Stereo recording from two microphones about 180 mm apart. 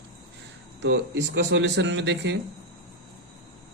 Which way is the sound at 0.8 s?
75° right (ahead or behind).